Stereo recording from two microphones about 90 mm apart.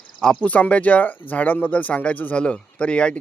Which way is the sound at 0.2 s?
5° left (ahead or behind).